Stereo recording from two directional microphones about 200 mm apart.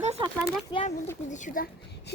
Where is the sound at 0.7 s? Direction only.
20° left (ahead or behind).